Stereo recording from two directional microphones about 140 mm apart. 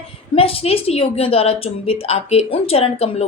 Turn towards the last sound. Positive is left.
turn(degrees=45)  # may be behind; listen again after turning